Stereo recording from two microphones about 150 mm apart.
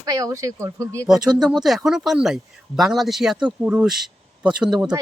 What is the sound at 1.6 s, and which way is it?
Speech, centre (ahead or behind).